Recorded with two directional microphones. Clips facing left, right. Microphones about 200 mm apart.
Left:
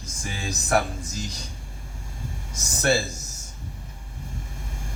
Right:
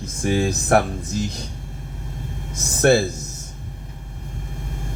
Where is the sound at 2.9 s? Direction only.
60° right (ahead or behind).